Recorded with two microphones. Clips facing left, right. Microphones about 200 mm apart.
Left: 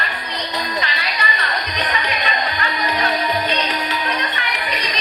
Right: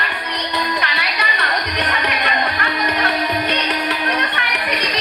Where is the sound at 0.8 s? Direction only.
65° right (ahead or behind).